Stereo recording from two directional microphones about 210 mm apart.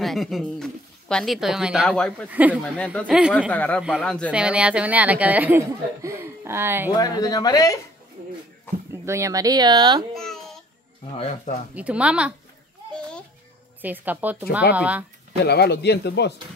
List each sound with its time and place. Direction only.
0.0 s speech: centre (ahead or behind)
2.3 s speech: 5° right (ahead or behind)
2.6 s speech: 5° left (ahead or behind)
3.5 s speech: 5° left (ahead or behind); by 6.9 s 10° right (ahead or behind)
7.0 s speech: 20° left (ahead or behind)
9.0 s speech: 15° right (ahead or behind)
10.1 s babbling: centre (ahead or behind)
11.1 s speech: 30° left (ahead or behind)
11.7 s speech: 5° right (ahead or behind)
13.7 s speech: 10° right (ahead or behind)
15.4 s speech: 50° left (ahead or behind)